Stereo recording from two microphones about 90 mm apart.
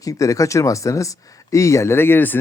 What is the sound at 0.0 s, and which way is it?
Speech, 40° left (ahead or behind).